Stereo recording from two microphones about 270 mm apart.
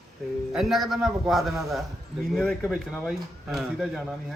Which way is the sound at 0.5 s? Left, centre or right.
Centre.